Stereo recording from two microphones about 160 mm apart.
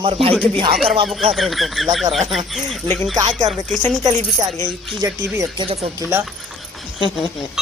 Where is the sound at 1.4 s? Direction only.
Centre (ahead or behind).